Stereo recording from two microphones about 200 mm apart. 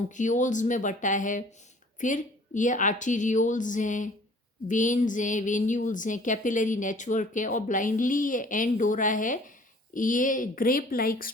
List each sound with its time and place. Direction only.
0.1 s a woman's voice: 40° left (ahead or behind)